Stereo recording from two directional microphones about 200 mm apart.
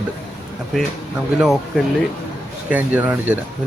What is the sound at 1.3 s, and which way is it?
Speech, 5° right (ahead or behind).